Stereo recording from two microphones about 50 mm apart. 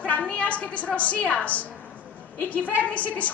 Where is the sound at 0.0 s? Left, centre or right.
Left.